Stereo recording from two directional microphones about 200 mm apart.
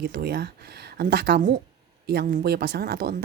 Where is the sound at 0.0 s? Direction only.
50° right (ahead or behind).